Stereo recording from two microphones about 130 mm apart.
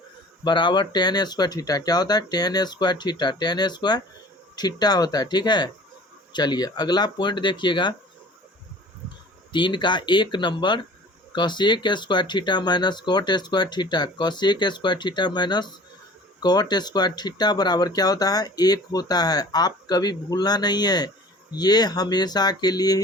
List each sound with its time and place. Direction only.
0.4 s speech: 35° left (ahead or behind)
9.5 s speech: 35° left (ahead or behind)